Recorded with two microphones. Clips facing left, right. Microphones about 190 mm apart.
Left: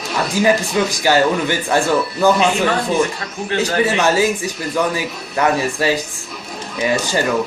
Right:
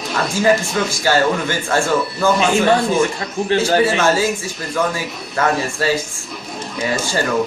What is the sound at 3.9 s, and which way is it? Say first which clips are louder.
A man's voice: left 1 dB; 15° left (ahead or behind).